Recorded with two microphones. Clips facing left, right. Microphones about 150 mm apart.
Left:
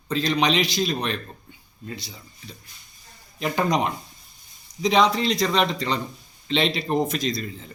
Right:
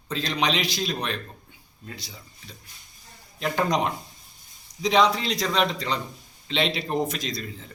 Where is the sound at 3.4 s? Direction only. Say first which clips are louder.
Left 1 dB; 5° left (ahead or behind).